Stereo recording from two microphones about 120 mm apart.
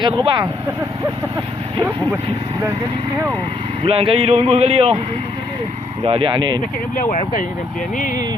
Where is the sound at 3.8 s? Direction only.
50° right (ahead or behind).